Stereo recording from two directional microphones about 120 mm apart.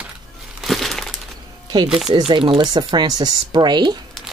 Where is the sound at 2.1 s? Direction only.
45° right (ahead or behind).